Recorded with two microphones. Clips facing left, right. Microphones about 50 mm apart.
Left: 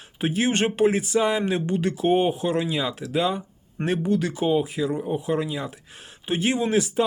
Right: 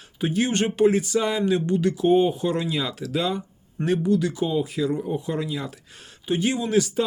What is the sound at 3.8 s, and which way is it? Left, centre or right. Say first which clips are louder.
Speech: right 2 dB; left.